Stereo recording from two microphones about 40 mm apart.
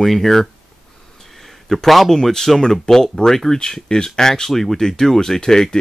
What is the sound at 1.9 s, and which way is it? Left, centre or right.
Speech, centre.